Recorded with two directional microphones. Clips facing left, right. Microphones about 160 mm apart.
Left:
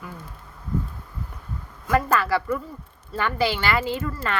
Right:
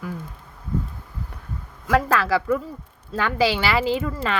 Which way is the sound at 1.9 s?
90° right.